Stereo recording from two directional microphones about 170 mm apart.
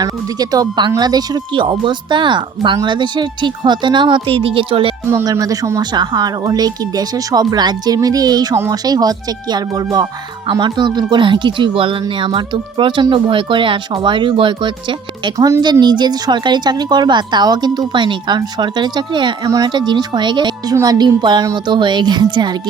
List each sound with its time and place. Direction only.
0.0 s speech: 25° right (ahead or behind)
5.0 s speech: 20° right (ahead or behind)